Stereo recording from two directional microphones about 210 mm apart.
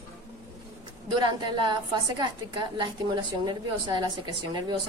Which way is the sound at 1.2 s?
20° right (ahead or behind).